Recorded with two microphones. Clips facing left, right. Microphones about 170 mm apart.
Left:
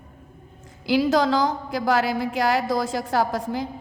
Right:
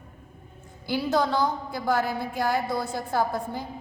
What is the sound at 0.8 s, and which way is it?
A woman's voice, 90° left.